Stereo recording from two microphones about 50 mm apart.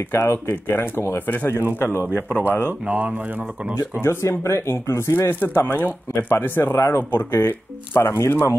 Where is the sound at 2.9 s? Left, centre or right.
Right.